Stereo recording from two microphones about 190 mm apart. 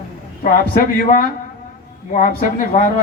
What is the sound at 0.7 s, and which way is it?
A man's voice, 45° left (ahead or behind).